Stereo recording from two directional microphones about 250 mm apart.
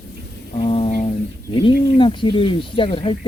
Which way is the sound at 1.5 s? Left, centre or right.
Centre.